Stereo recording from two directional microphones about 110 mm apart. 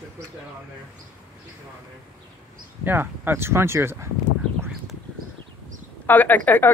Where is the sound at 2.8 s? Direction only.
20° right (ahead or behind).